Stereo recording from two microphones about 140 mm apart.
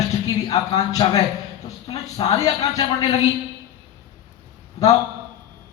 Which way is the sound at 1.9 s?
25° left (ahead or behind).